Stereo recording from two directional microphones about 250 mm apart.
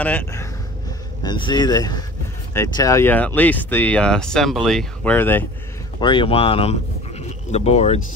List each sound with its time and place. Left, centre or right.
0.0 s speech: centre
5.9 s speech: centre